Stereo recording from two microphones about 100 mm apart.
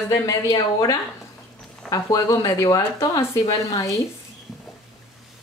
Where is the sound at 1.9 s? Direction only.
40° left (ahead or behind).